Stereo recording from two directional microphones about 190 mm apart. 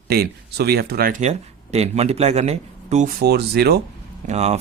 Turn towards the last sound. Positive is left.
turn(degrees=-35)  # may be behind; listen again after turning